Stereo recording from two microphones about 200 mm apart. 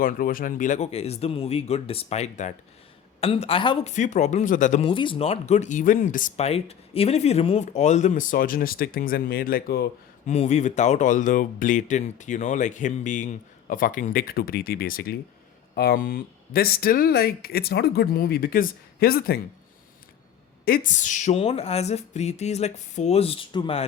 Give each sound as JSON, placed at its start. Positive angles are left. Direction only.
{"t": 0.0, "sound": "speech", "side_deg": 45}
{"t": 3.9, "sound": "speech", "side_deg": 35}
{"t": 4.9, "sound": "speech", "side_deg": 25}
{"t": 10.2, "sound": "speech", "side_deg": 35}
{"t": 20.7, "sound": "speech", "side_deg": 45}